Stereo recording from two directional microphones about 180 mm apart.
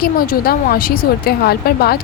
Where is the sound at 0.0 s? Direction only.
55° left (ahead or behind).